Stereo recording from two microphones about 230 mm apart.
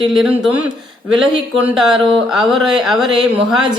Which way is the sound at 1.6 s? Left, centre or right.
Centre.